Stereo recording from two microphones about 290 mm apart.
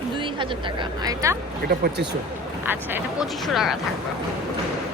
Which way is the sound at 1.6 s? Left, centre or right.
Right.